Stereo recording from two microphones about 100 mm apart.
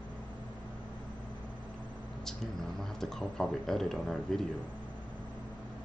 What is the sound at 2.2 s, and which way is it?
Speech, 5° left (ahead or behind).